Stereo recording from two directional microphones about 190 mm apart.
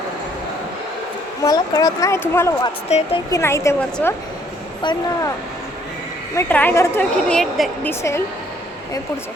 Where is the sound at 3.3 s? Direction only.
15° left (ahead or behind).